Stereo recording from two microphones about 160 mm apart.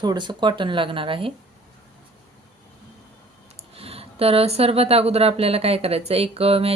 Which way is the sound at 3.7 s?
35° right (ahead or behind).